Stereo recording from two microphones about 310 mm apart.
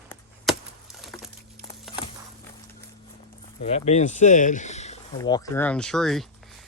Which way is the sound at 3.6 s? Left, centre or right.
Left.